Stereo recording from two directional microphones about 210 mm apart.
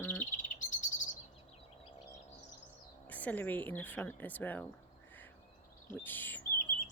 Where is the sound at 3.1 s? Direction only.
10° left (ahead or behind).